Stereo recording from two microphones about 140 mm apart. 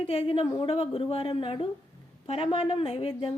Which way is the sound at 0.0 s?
45° left (ahead or behind).